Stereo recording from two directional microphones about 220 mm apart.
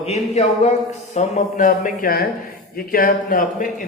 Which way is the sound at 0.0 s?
30° left (ahead or behind).